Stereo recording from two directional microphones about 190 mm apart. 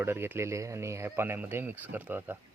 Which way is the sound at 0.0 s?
10° right (ahead or behind).